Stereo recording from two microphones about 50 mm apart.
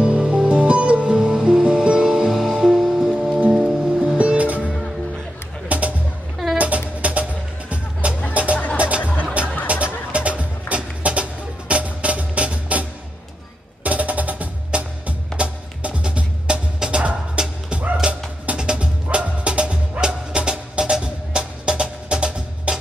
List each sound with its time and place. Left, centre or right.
0.0 s music: centre
3.5 s music: centre
4.2 s music: right
5.7 s music: right
6.3 s a sound: centre
7.0 s music: right
9.0 s music: left
9.7 s music: right
13.8 s music: right